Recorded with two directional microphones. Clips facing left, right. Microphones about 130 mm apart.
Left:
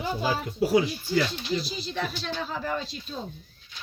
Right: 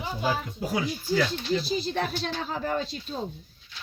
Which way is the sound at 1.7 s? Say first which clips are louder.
Right 4 dB; 50° right (ahead or behind).